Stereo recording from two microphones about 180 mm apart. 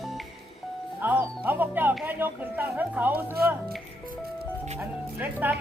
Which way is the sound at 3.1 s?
60° right (ahead or behind).